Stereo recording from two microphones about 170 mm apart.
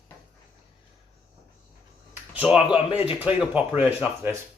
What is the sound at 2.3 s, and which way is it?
Speech, 5° right (ahead or behind).